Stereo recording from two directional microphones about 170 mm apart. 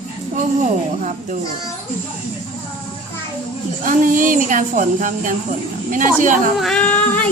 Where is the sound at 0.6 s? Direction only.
45° right (ahead or behind).